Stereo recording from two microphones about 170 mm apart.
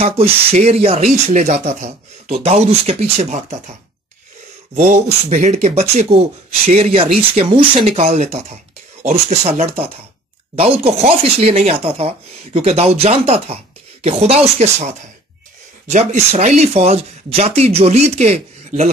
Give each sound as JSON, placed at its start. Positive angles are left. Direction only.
{"t": 0.2, "sound": "speech", "side_deg": -35}
{"t": 4.7, "sound": "speech", "side_deg": -40}